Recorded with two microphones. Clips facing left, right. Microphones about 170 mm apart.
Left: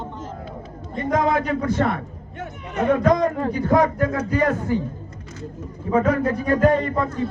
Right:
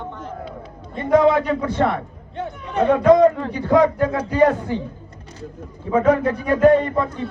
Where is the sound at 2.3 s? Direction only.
30° right (ahead or behind).